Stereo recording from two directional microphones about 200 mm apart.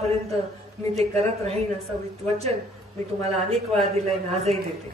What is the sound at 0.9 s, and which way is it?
Speech, 30° right (ahead or behind).